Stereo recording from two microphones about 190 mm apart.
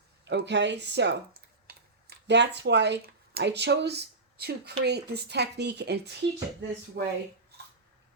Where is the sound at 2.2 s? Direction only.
65° right (ahead or behind).